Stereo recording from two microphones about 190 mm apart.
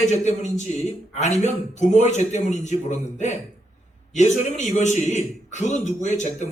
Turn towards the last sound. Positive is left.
turn(degrees=40)  # may be behind; listen again after turning